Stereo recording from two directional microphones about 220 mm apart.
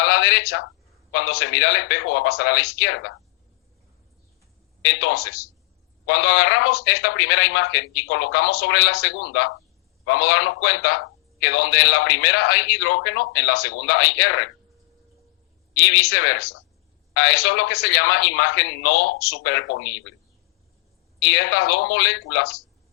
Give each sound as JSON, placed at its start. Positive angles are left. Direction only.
{"t": 0.0, "sound": "a sound", "side_deg": 50}
{"t": 1.1, "sound": "speech", "side_deg": 50}
{"t": 2.8, "sound": "speech", "side_deg": 65}
{"t": 4.9, "sound": "speech", "side_deg": 50}
{"t": 6.7, "sound": "speech", "side_deg": 50}
{"t": 15.8, "sound": "speech", "side_deg": 50}
{"t": 17.2, "sound": "speech", "side_deg": 50}
{"t": 17.4, "sound": "speech", "side_deg": 75}
{"t": 17.7, "sound": "speech", "side_deg": 50}
{"t": 21.2, "sound": "speech", "side_deg": 55}